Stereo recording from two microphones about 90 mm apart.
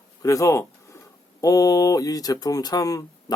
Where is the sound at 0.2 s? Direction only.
35° left (ahead or behind).